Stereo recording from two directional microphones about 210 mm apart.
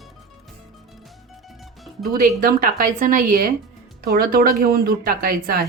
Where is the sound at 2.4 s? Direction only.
40° right (ahead or behind).